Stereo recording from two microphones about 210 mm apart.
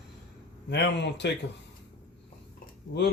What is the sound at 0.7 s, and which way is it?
Speech, 55° left (ahead or behind).